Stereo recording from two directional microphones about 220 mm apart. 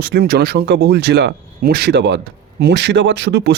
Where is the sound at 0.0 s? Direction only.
45° right (ahead or behind).